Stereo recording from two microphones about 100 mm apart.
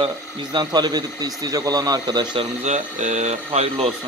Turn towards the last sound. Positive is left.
turn(degrees=-90)